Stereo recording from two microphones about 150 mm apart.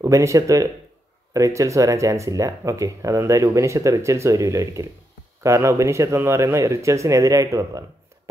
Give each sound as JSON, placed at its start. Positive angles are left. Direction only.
{"t": 0.0, "sound": "speech", "side_deg": -20}